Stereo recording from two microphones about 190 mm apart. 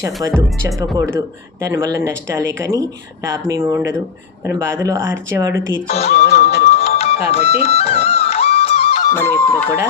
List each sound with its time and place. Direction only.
0.0 s speech: 15° right (ahead or behind)
5.9 s music: 35° left (ahead or behind)
9.0 s music: 15° left (ahead or behind)